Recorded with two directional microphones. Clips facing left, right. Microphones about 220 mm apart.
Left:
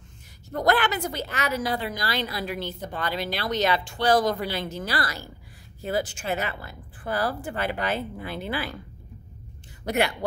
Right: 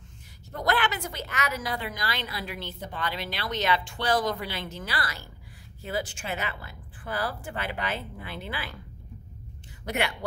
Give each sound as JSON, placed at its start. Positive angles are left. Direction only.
{"t": 0.6, "sound": "a woman's voice", "side_deg": 45}
{"t": 9.8, "sound": "a woman's voice", "side_deg": 40}